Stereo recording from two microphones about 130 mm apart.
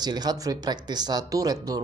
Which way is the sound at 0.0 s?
30° right (ahead or behind).